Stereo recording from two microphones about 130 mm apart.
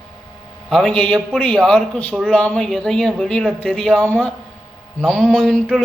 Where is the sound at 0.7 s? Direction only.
5° left (ahead or behind).